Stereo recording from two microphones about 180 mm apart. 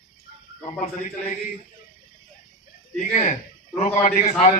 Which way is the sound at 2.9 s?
45° left (ahead or behind).